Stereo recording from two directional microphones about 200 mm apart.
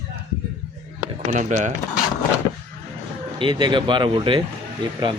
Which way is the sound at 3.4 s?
25° right (ahead or behind).